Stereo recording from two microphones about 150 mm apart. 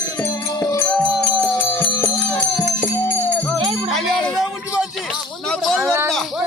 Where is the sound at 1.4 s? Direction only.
25° left (ahead or behind).